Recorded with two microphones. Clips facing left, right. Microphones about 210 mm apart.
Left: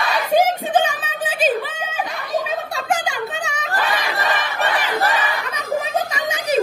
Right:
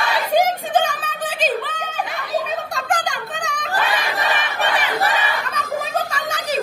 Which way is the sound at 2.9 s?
5° left (ahead or behind).